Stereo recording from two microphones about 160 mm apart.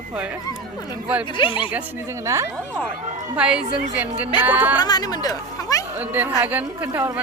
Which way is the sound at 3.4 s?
5° right (ahead or behind).